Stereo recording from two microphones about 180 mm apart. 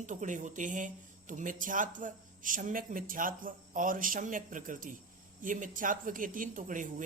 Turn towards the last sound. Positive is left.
turn(degrees=-45)  # may be behind; listen again after turning